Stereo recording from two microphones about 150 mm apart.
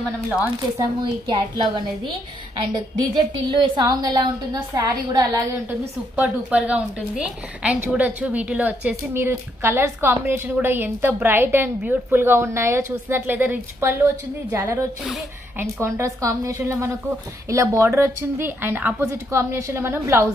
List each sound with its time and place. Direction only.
0.7 s a woman's voice: 25° right (ahead or behind)
3.4 s a woman's voice: 30° right (ahead or behind)
6.1 s a woman's voice: 10° right (ahead or behind)